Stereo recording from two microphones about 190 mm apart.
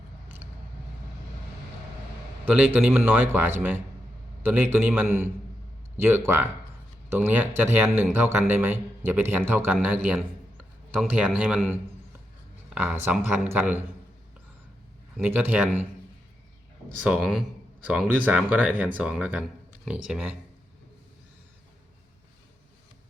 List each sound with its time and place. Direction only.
2.5 s a man's voice: 10° right (ahead or behind)
12.7 s a man's voice: 10° right (ahead or behind)
15.2 s a man's voice: 10° right (ahead or behind)
17.1 s a man's voice: centre (ahead or behind)